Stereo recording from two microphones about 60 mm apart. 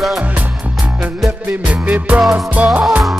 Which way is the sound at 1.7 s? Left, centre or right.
Right.